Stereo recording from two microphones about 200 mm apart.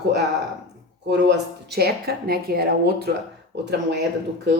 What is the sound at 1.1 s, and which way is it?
Speech, 55° right (ahead or behind).